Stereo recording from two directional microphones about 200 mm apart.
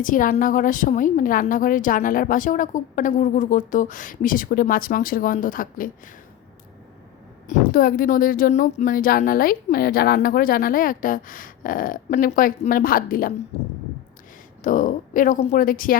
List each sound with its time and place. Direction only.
0.0 s a woman's voice: 45° left (ahead or behind)
7.4 s a woman's voice: 40° left (ahead or behind)
13.5 s a woman's voice: 35° left (ahead or behind)